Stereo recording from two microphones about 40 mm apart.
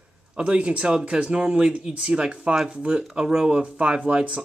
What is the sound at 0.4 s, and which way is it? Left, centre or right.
Speech, right.